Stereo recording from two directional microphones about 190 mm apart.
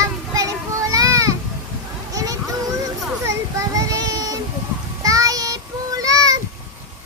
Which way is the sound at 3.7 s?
20° right (ahead or behind).